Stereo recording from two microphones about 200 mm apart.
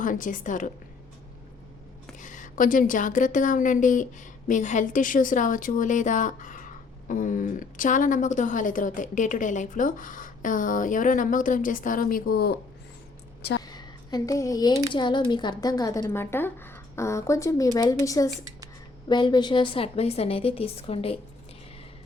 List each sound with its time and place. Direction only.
0.0 s a woman's voice: 40° left (ahead or behind)
2.1 s a woman's voice: 40° left (ahead or behind)
13.6 s a sound: 20° left (ahead or behind)
14.9 s a woman's voice: 20° left (ahead or behind)